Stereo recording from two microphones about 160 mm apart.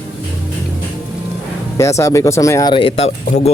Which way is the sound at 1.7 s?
20° left (ahead or behind).